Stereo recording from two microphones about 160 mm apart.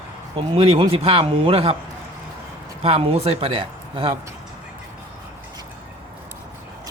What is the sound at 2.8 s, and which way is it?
Speech, 40° right (ahead or behind).